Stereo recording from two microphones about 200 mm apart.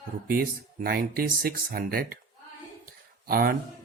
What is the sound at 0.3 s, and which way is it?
Speech, 45° right (ahead or behind).